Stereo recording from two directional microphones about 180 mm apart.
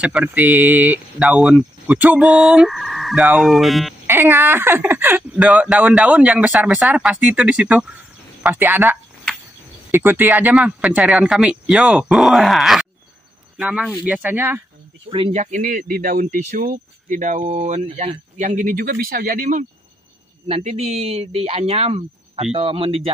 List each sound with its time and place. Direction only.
0.0 s speech: 5° right (ahead or behind)
4.1 s speech: 10° right (ahead or behind)
15.0 s speech: 35° right (ahead or behind); by 19.6 s 50° right (ahead or behind)
20.4 s speech: 35° right (ahead or behind)